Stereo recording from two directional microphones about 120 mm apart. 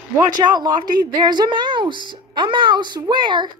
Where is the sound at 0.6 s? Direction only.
35° right (ahead or behind).